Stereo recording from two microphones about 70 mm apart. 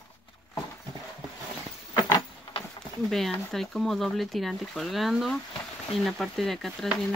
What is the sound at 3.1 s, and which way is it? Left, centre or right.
Speech, centre.